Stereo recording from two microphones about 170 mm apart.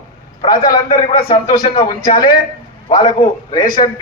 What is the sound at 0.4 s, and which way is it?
A man's voice, 25° left (ahead or behind).